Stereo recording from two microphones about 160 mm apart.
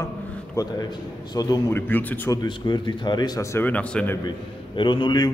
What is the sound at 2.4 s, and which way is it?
A man's voice, 30° left (ahead or behind).